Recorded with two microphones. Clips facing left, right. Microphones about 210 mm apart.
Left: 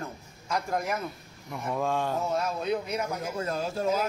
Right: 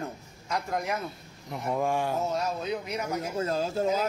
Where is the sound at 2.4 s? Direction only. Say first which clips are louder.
Left 2 dB; centre (ahead or behind).